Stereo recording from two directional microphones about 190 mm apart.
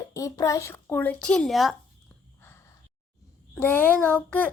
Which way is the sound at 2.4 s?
10° left (ahead or behind).